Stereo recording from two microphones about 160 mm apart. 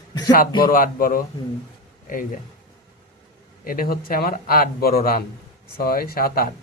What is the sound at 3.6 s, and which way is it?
Speech, 65° left (ahead or behind).